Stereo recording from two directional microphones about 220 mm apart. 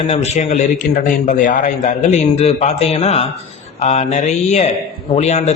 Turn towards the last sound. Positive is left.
turn(degrees=30)  # may be behind; listen again after turning